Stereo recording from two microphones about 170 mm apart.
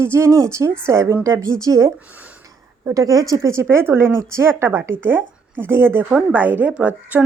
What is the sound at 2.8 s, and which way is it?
A woman's voice, 20° right (ahead or behind).